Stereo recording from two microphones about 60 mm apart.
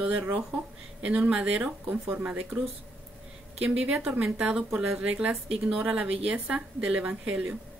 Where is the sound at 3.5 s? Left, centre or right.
Centre.